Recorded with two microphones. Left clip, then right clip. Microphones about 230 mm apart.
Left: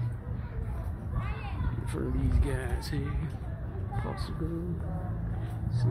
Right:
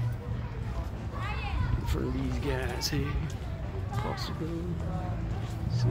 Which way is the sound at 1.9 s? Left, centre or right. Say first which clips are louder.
Even; centre.